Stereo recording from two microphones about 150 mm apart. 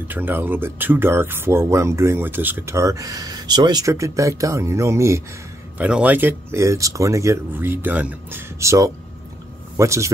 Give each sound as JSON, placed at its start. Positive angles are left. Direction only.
{"t": 0.1, "sound": "speech", "side_deg": -15}
{"t": 5.8, "sound": "speech", "side_deg": -10}